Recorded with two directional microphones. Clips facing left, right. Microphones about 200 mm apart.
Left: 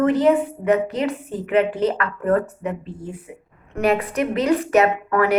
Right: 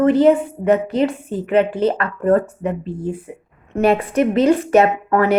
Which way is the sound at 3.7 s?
25° right (ahead or behind).